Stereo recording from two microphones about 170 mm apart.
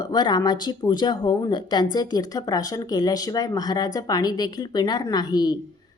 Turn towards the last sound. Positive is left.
turn(degrees=25)  # may be behind; listen again after turning